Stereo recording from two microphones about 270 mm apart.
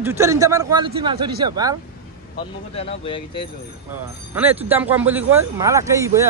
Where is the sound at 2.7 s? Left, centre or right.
Left.